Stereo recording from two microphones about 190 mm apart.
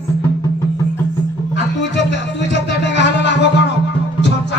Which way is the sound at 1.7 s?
70° left (ahead or behind).